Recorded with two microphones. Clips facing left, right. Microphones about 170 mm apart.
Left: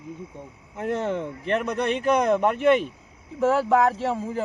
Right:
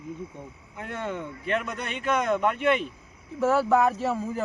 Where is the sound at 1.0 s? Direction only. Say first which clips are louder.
Left 5 dB; 30° left (ahead or behind).